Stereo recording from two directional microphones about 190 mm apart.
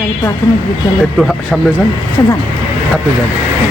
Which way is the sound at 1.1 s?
Centre (ahead or behind).